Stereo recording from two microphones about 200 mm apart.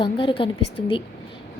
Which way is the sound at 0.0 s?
25° left (ahead or behind).